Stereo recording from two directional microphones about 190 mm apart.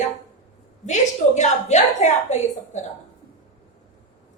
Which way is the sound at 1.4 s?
40° left (ahead or behind).